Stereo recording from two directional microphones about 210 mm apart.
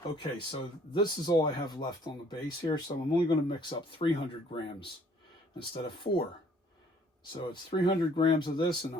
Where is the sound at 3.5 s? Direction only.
20° left (ahead or behind).